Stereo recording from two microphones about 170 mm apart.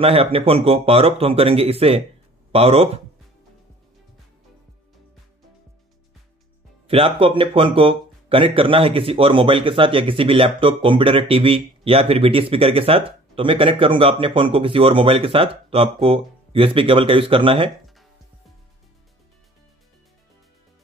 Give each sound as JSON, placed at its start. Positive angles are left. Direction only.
{"t": 0.0, "sound": "speech", "side_deg": -35}
{"t": 6.9, "sound": "speech", "side_deg": -30}